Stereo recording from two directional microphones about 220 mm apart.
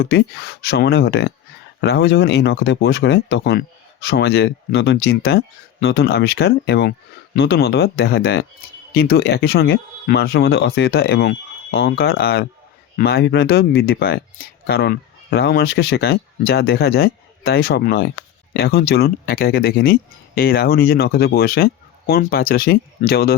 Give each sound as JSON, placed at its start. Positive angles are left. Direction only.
{"t": 0.0, "sound": "speech", "side_deg": 45}